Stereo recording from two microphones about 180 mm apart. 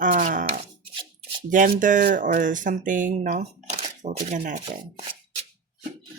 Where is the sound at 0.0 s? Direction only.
45° right (ahead or behind).